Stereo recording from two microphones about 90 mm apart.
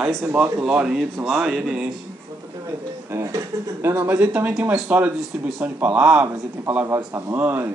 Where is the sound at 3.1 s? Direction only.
35° right (ahead or behind).